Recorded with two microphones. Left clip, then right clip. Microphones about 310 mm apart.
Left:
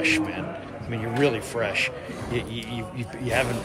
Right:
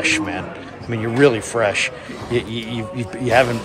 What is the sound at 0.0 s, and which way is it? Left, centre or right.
Speech, centre.